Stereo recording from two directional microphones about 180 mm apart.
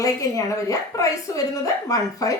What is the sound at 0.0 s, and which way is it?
A woman's voice, 20° left (ahead or behind).